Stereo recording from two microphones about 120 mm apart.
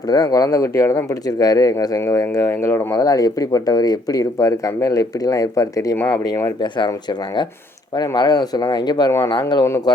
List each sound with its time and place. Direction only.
0.1 s speech: 30° left (ahead or behind)